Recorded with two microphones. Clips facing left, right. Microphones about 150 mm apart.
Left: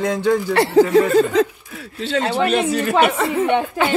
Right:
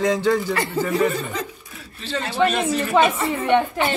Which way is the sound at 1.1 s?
90° left.